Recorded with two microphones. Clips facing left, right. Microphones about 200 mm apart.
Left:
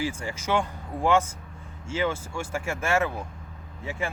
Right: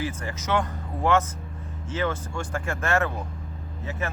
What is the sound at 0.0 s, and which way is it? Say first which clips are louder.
Speech: left 1 dB; 10° left (ahead or behind).